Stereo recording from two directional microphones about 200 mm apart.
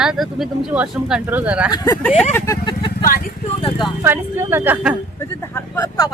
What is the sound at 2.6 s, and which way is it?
Vehicle, 20° left (ahead or behind).